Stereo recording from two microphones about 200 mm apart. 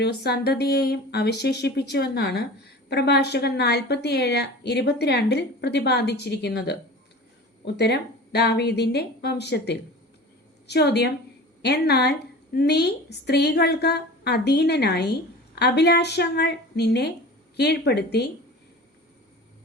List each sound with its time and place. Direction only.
0.0 s a woman's voice: 55° left (ahead or behind)